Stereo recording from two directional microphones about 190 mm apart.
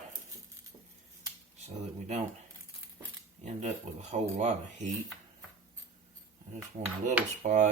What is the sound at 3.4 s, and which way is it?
Speech, 40° right (ahead or behind).